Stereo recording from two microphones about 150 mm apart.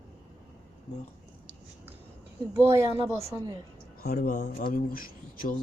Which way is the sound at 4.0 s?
80° left.